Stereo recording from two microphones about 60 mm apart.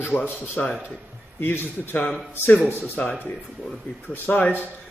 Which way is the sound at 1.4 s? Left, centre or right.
Left.